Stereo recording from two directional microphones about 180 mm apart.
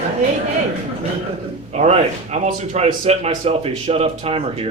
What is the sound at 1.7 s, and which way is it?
Speech, 40° right (ahead or behind).